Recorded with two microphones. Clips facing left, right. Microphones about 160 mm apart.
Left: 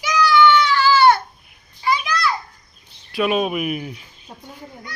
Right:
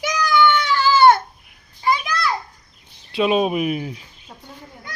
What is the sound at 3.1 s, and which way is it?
Speech, 25° right (ahead or behind).